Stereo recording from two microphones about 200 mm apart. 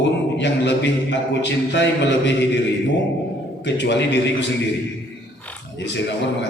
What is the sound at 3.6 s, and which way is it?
Speech, 60° left (ahead or behind).